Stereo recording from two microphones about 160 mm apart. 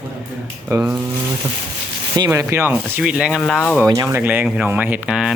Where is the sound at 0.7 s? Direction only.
10° right (ahead or behind).